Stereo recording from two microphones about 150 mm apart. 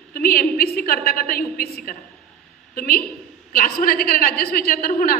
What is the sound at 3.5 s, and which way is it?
A woman's voice, 70° left (ahead or behind).